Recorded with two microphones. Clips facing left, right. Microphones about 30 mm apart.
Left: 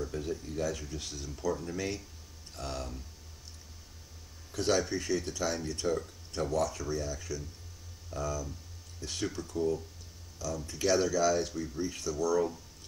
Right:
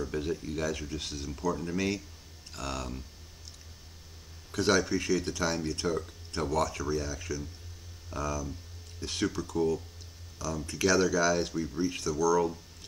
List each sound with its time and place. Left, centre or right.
0.0 s speech: right
2.5 s speech: right
4.6 s speech: right
5.3 s speech: right
5.9 s speech: right
6.5 s speech: right
6.8 s speech: right
12.2 s speech: right